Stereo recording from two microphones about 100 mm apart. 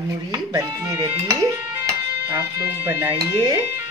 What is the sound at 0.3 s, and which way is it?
Speech, 30° right (ahead or behind).